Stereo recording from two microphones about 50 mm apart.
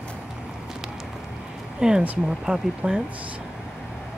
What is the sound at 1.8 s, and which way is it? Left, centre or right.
Speech, centre.